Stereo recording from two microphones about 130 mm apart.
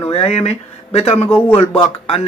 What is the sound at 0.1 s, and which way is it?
A man's voice, 50° left (ahead or behind).